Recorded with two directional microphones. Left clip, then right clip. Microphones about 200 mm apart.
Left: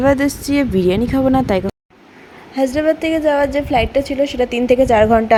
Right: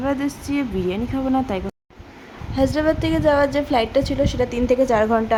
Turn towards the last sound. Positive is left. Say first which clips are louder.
# left 6 dB
turn(degrees=15)  # may be behind; listen again after turning